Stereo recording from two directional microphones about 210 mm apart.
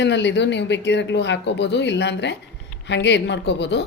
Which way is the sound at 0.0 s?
55° left (ahead or behind).